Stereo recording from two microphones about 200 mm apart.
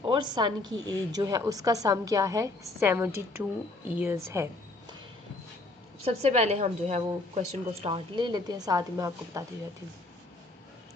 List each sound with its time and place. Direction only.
0.0 s a woman's voice: 25° right (ahead or behind)
6.0 s a woman's voice: 30° right (ahead or behind); by 9.4 s 15° right (ahead or behind)